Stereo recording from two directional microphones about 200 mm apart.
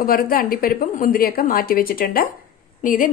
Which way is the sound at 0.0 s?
45° left (ahead or behind).